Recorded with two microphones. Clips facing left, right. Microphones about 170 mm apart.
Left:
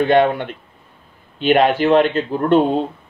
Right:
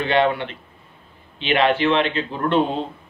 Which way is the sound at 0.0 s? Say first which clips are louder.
Left 5 dB; 50° left (ahead or behind).